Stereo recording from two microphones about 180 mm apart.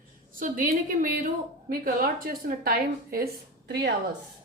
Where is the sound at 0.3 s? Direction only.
50° right (ahead or behind).